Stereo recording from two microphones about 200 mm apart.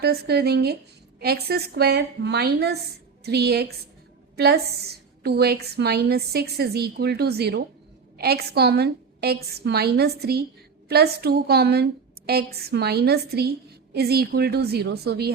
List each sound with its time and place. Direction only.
0.0 s a woman's voice: 55° right (ahead or behind)